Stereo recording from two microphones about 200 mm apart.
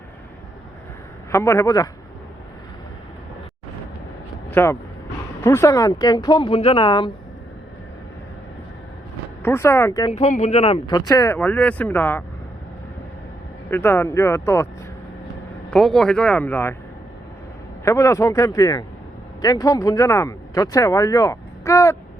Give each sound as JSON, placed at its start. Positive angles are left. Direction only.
{"t": 1.3, "sound": "speech", "side_deg": 15}
{"t": 4.5, "sound": "speech", "side_deg": 15}
{"t": 9.4, "sound": "speech", "side_deg": 10}
{"t": 10.1, "sound": "speech", "side_deg": 35}
{"t": 13.7, "sound": "speech", "side_deg": 10}
{"t": 15.7, "sound": "speech", "side_deg": 5}
{"t": 17.8, "sound": "speech", "side_deg": 15}